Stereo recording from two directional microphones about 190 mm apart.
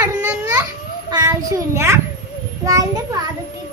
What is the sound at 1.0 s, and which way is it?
A child's voice, 20° right (ahead or behind).